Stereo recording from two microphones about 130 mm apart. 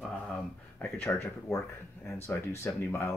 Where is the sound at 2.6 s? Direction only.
20° left (ahead or behind).